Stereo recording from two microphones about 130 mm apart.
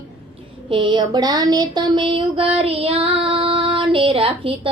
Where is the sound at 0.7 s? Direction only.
40° right (ahead or behind).